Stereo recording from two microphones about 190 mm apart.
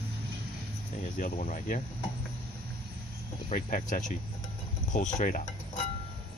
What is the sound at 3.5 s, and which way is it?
Speech, 45° left (ahead or behind).